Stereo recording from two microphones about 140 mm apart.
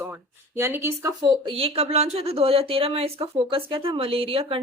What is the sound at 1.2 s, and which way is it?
Speech, 35° right (ahead or behind).